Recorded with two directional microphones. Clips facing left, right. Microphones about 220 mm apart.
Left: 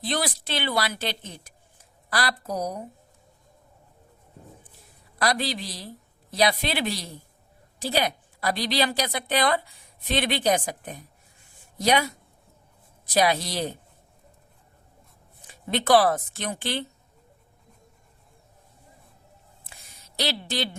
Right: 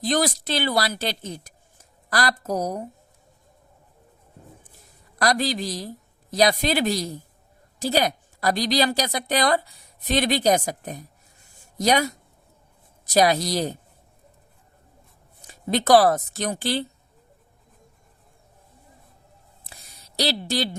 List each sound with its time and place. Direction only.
0.0 s a woman's voice: 45° right (ahead or behind)
5.2 s a woman's voice: 45° right (ahead or behind)
13.1 s a woman's voice: 40° right (ahead or behind)
15.4 s speech: 40° right (ahead or behind)
19.7 s a sound: 35° right (ahead or behind)